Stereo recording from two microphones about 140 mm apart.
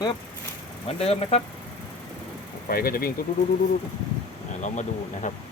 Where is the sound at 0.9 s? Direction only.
45° left (ahead or behind).